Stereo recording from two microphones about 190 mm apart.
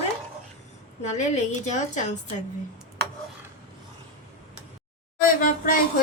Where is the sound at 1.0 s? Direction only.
40° left (ahead or behind).